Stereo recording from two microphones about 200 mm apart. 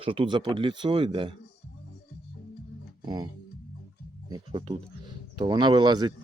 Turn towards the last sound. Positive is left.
turn(degrees=-20)  # may be behind; listen again after turning